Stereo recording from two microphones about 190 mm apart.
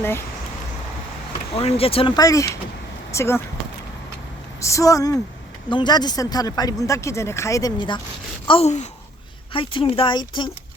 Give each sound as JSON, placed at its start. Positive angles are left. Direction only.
{"t": 1.5, "sound": "a woman's voice", "side_deg": 30}
{"t": 4.6, "sound": "a woman's voice", "side_deg": 15}